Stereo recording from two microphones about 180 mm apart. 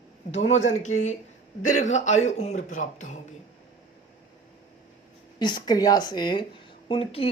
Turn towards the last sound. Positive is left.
turn(degrees=30)  # may be behind; listen again after turning